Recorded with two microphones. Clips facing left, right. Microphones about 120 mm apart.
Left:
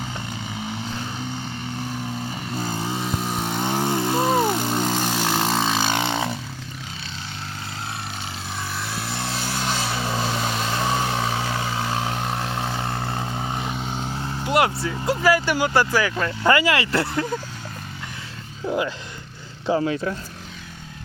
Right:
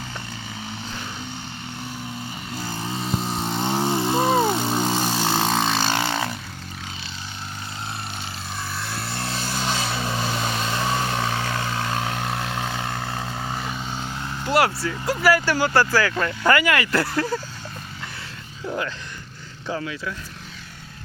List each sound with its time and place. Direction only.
2.6 s vehicle: 20° left (ahead or behind)
3.8 s vehicle: 20° right (ahead or behind)
5.5 s vehicle: 10° left (ahead or behind)
8.7 s vehicle: centre (ahead or behind); by 14.3 s 20° left (ahead or behind)
14.4 s speech: 20° left (ahead or behind)
18.7 s speech: 15° left (ahead or behind)
19.6 s speech: 30° left (ahead or behind)